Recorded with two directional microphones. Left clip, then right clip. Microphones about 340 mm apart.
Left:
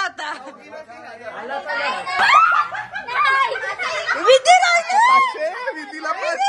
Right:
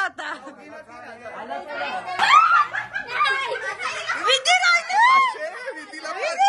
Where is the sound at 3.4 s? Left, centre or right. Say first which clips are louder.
Left 5 dB; left.